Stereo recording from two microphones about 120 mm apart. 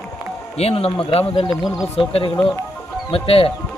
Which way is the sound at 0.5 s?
55° left (ahead or behind).